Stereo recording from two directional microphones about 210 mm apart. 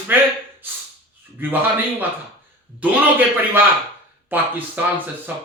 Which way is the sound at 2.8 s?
10° right (ahead or behind).